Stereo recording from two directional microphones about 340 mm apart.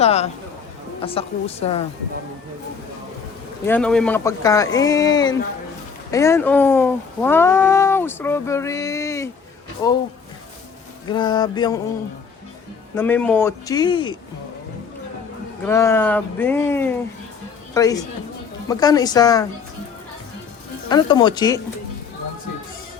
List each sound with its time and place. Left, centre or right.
0.0 s speech: centre
3.7 s speech: centre
11.0 s speech: centre
13.0 s speech: centre
15.6 s speech: centre
20.9 s speech: centre